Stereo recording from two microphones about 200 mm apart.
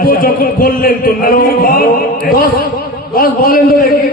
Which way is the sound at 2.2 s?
50° left (ahead or behind).